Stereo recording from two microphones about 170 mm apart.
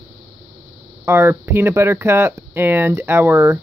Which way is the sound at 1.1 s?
15° right (ahead or behind).